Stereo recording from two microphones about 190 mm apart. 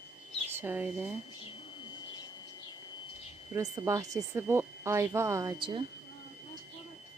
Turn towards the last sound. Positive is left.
turn(degrees=-25)  # may be behind; listen again after turning